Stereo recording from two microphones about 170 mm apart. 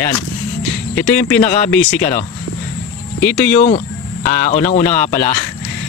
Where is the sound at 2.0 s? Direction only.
45° left (ahead or behind).